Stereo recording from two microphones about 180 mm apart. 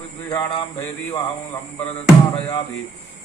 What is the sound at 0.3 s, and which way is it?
Mantra, 20° left (ahead or behind).